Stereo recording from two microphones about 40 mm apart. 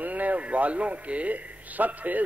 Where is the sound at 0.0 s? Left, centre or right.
Right.